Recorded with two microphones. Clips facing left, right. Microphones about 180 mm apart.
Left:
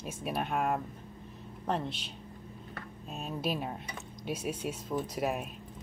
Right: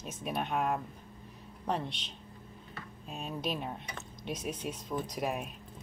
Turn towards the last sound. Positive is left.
turn(degrees=0)  # may be behind; listen again after turning